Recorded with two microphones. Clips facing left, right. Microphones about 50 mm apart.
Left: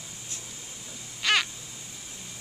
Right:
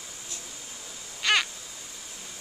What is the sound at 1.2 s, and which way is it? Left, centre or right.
Crow, centre.